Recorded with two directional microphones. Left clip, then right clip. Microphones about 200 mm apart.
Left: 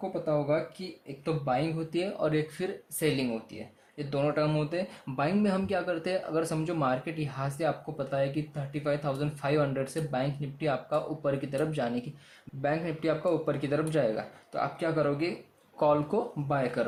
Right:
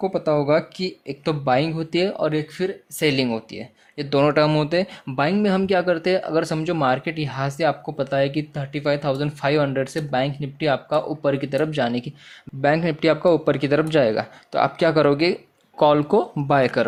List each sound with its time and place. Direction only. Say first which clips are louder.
0.1 s speech: right 7 dB; 45° right (ahead or behind); by 3.1 s 25° right (ahead or behind)
3.2 s speech: right 10 dB; 35° right (ahead or behind)